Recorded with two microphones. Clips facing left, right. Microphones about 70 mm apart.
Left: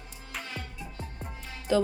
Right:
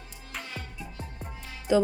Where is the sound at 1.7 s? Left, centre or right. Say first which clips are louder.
Right 2 dB; centre.